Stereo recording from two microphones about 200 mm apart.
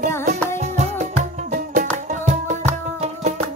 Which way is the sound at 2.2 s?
35° right (ahead or behind).